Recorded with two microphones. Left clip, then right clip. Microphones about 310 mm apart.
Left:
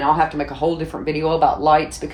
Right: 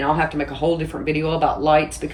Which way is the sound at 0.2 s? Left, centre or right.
Centre.